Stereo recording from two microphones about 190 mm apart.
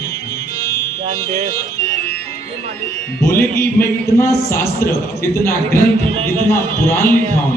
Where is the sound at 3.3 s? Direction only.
15° left (ahead or behind).